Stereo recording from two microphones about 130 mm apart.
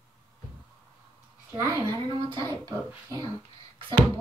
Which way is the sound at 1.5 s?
20° right (ahead or behind).